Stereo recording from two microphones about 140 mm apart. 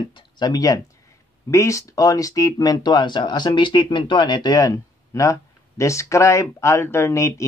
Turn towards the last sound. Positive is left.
turn(degrees=20)  # may be behind; listen again after turning